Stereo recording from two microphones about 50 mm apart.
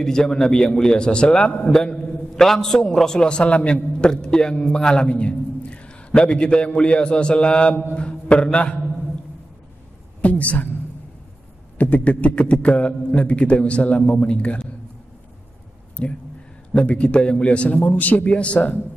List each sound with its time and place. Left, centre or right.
0.0 s a man's voice: centre
10.2 s a woman's voice: left
11.8 s a man's voice: left
16.0 s a man's voice: left